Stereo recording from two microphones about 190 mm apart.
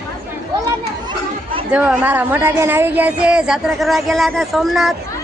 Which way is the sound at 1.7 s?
5° right (ahead or behind).